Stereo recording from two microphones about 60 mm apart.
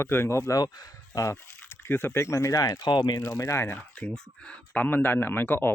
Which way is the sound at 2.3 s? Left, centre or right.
Left.